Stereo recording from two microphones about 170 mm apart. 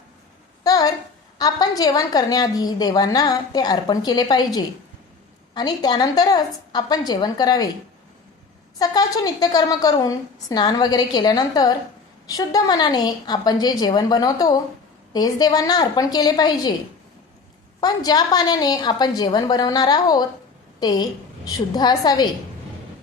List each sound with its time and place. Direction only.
0.6 s a sound: 20° left (ahead or behind)
1.4 s a woman's voice: 20° left (ahead or behind)
8.8 s a woman's voice: 20° left (ahead or behind)
17.7 s a woman's voice: 25° left (ahead or behind)